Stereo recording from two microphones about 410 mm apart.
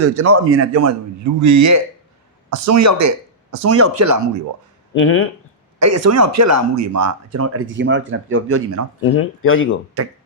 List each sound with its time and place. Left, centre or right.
0.0 s speech: right
4.9 s speech: left
5.8 s speech: right
9.0 s speech: left
10.0 s speech: right